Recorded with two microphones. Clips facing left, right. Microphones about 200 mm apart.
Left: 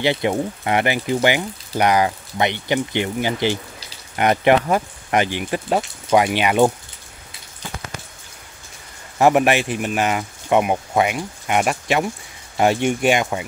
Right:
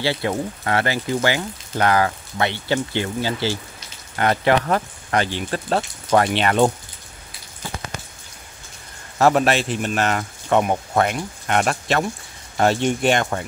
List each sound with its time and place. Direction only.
0.0 s speech: 20° left (ahead or behind)
9.2 s speech: 15° left (ahead or behind)